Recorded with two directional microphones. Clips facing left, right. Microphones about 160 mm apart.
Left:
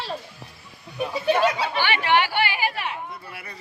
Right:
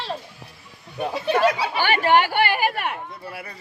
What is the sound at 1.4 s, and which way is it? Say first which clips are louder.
Speech: right 2 dB; 10° right (ahead or behind).